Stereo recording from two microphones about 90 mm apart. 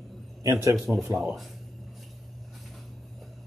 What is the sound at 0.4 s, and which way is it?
Speech, 35° right (ahead or behind).